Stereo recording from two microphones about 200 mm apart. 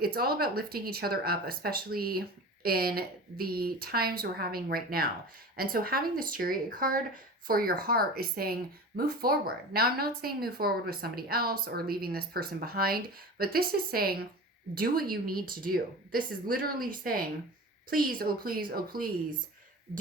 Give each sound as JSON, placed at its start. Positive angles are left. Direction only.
{"t": 0.0, "sound": "speech", "side_deg": -50}